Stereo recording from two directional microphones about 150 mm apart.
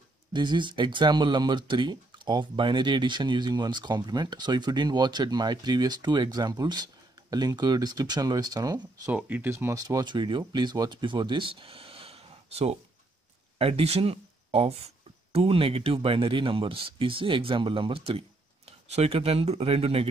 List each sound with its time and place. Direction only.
0.3 s speech: 30° right (ahead or behind)
9.1 s speech: 10° right (ahead or behind); by 20.1 s 40° right (ahead or behind)